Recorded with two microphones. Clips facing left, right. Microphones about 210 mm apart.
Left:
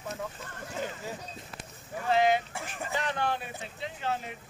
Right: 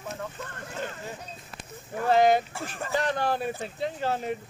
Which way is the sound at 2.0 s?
40° right (ahead or behind).